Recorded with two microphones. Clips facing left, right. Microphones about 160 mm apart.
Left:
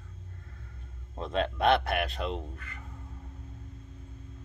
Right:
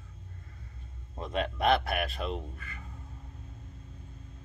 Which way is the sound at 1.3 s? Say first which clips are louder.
Left 2 dB; 5° right (ahead or behind).